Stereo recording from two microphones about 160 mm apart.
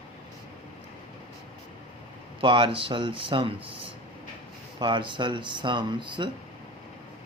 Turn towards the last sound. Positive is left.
turn(degrees=-30)  # may be behind; listen again after turning